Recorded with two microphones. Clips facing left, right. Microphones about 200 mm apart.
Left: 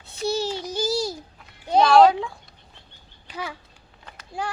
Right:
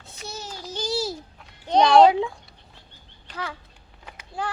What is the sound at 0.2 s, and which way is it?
Child singing, 30° left (ahead or behind).